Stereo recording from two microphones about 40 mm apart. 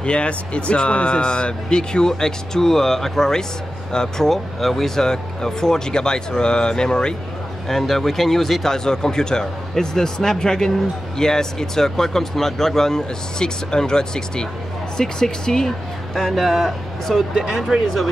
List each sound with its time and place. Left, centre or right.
0.0 s speech: left
4.3 s speech: centre
7.6 s speech: centre
16.3 s speech: centre